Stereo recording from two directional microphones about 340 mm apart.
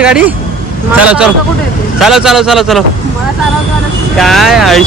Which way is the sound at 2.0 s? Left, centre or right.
Centre.